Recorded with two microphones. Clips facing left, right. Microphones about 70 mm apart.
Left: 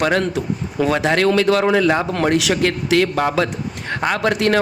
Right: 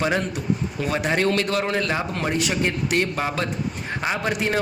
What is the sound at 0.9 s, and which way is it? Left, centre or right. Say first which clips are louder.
A man's voice: left 5 dB; left.